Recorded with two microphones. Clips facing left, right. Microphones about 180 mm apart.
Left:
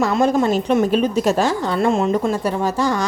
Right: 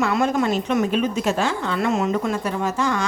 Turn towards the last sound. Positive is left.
turn(degrees=35)  # may be behind; listen again after turning